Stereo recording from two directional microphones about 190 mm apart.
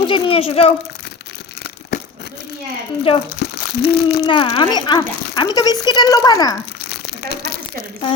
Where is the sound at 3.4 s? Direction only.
55° left (ahead or behind).